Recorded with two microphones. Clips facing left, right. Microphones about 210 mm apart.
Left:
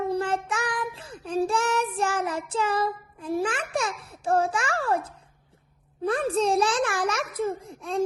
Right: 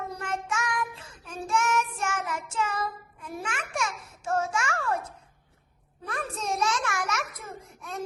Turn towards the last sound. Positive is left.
turn(degrees=30)  # may be behind; listen again after turning